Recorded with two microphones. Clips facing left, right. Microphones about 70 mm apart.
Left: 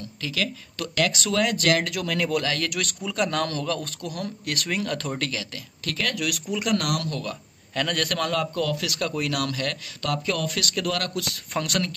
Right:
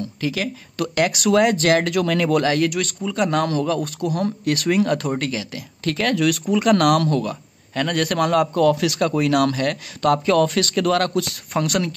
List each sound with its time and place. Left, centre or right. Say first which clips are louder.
0.2 s speech: right 4 dB; right
2.4 s speech: right 9 dB; right
2.7 s speech: right 5 dB; centre
4.1 s speech: right 10 dB; right
4.9 s speech: right 6 dB; centre
5.9 s speech: right 9 dB; right
7.2 s a man's voice: right 5 dB; centre
8.3 s speech: right 9 dB; right
11.5 s speech: right 5 dB; centre